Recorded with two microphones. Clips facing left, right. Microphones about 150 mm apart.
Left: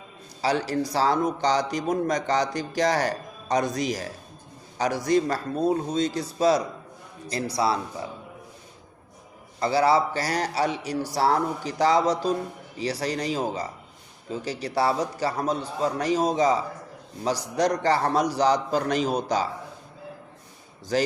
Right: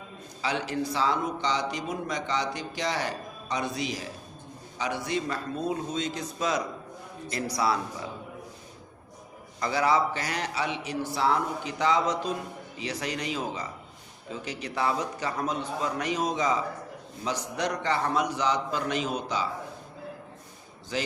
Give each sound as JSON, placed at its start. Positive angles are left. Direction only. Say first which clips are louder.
{"t": 0.4, "sound": "a man's voice", "louder": "left 5 dB", "side_deg": 40}
{"t": 9.6, "sound": "a man's voice", "louder": "left 4 dB", "side_deg": 30}
{"t": 20.9, "sound": "a man's voice", "louder": "left 8 dB", "side_deg": 40}